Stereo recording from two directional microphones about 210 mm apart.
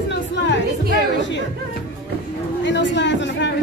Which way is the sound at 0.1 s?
55° left (ahead or behind).